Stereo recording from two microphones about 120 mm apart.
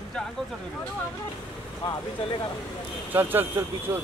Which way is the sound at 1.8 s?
50° left (ahead or behind).